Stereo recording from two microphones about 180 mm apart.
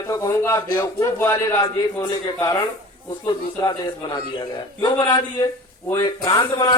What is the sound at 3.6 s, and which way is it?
A man's voice, 20° left (ahead or behind).